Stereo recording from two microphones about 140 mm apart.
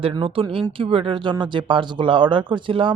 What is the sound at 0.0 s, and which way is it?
Speech, 40° right (ahead or behind).